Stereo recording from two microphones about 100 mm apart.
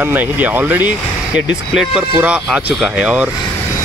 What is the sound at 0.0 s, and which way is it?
Speech, 20° right (ahead or behind).